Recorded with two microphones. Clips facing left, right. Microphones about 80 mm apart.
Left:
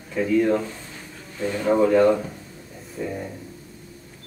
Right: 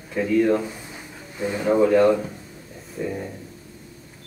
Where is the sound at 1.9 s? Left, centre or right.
Centre.